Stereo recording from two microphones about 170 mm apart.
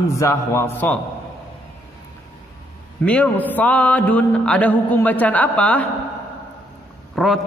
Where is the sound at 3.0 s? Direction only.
10° left (ahead or behind).